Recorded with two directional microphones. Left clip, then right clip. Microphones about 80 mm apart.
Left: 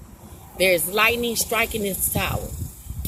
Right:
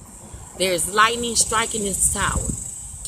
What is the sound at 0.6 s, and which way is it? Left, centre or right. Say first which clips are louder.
Speech: even; right.